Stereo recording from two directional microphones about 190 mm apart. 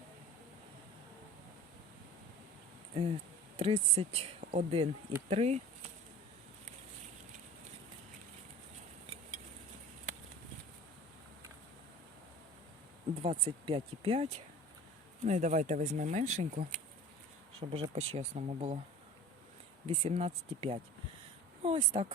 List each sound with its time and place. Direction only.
2.9 s speech: 35° right (ahead or behind)
13.2 s speech: 30° right (ahead or behind); by 16.8 s 45° right (ahead or behind)
17.6 s speech: 30° right (ahead or behind)
19.9 s speech: 35° right (ahead or behind)
21.6 s a sound: 30° right (ahead or behind)